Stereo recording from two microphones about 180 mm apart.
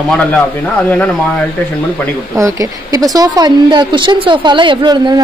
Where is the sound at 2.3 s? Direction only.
15° right (ahead or behind).